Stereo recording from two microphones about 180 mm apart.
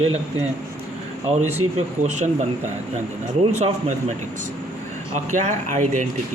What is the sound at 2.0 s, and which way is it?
Speech, 40° right (ahead or behind).